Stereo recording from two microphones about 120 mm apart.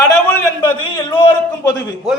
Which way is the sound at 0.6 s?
40° left (ahead or behind).